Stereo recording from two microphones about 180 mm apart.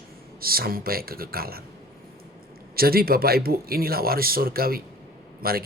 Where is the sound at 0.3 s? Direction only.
55° right (ahead or behind).